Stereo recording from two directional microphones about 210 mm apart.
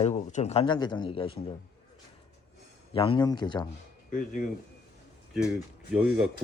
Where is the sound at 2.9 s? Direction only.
25° left (ahead or behind).